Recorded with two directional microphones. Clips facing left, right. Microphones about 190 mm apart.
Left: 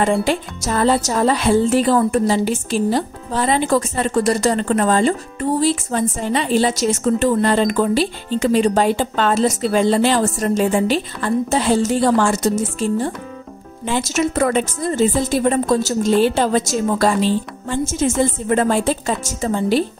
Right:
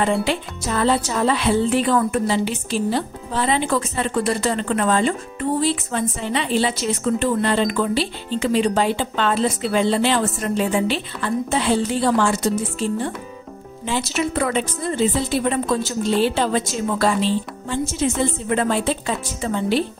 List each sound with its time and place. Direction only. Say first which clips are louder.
0.0 s a woman's voice: left 3 dB; 45° left (ahead or behind)